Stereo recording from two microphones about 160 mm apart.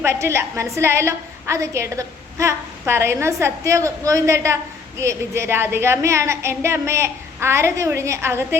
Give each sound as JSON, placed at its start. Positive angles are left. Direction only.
{"t": 0.0, "sound": "a woman's voice", "side_deg": -15}